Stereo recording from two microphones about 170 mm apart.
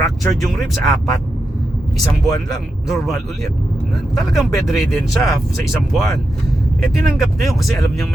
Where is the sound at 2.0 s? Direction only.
20° left (ahead or behind).